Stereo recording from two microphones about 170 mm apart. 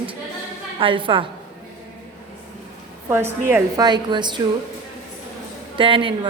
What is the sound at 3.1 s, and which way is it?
Speech, 15° right (ahead or behind).